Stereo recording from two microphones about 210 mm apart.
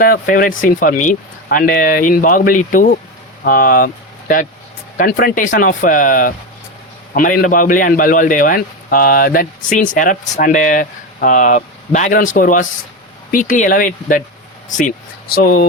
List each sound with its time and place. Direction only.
0.0 s a man's voice: 45° left (ahead or behind)